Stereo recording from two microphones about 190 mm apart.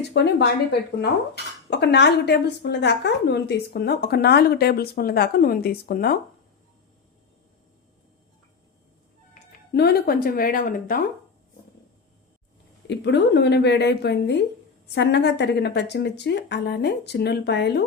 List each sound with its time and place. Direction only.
0.1 s speech: 65° left (ahead or behind)
1.7 s a woman's voice: 65° left (ahead or behind)
9.7 s a woman's voice: 60° left (ahead or behind)
12.9 s a woman's voice: 65° left (ahead or behind)